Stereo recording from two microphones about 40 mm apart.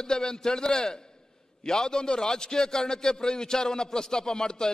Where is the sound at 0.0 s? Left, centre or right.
Centre.